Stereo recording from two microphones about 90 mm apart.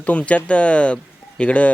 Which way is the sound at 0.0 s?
15° left (ahead or behind).